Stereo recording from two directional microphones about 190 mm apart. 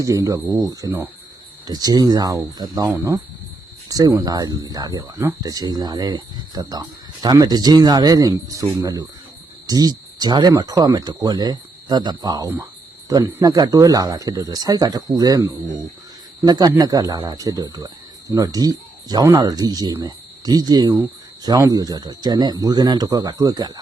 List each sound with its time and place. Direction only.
0.0 s speech: 15° right (ahead or behind)